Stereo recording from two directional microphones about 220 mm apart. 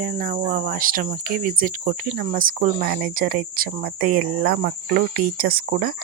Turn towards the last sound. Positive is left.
turn(degrees=-40)  # may be behind; listen again after turning